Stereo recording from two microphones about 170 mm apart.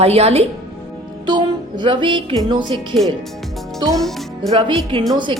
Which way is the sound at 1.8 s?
30° right (ahead or behind).